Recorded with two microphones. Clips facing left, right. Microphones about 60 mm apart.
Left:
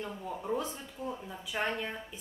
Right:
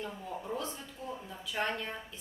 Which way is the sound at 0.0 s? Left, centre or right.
Centre.